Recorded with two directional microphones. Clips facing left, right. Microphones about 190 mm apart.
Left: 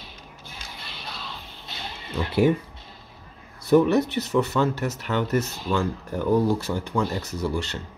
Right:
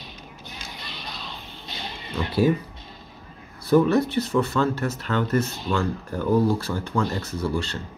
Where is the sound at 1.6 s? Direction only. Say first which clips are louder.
Right 1 dB; 5° left (ahead or behind).